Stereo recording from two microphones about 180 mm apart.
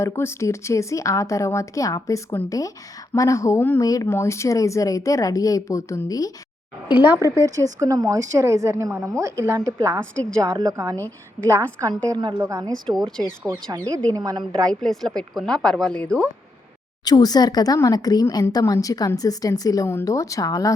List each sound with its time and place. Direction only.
0.0 s speech: 15° left (ahead or behind)
6.9 s a woman's voice: 10° right (ahead or behind)
10.2 s a woman's voice: 5° left (ahead or behind)
10.4 s a woman's voice: 20° right (ahead or behind)
14.7 s a woman's voice: centre (ahead or behind)
17.0 s speech: 20° left (ahead or behind)